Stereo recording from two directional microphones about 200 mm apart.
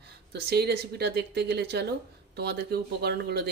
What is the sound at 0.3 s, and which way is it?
Speech, 55° right (ahead or behind).